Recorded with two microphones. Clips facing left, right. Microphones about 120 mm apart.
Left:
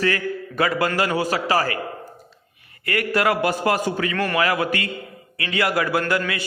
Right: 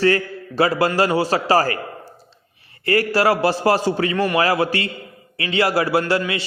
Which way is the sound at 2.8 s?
30° right (ahead or behind).